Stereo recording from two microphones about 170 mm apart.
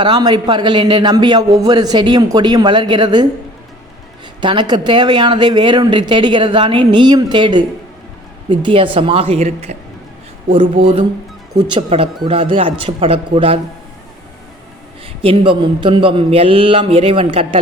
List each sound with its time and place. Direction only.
0.0 s a man's voice: 25° right (ahead or behind)
4.4 s a man's voice: 25° right (ahead or behind)
11.5 s a man's voice: 30° right (ahead or behind)
15.2 s a man's voice: 35° right (ahead or behind)